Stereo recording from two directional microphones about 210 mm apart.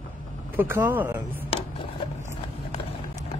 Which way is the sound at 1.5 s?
25° left (ahead or behind).